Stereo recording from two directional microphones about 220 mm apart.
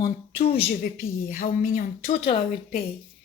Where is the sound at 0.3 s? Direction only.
25° left (ahead or behind).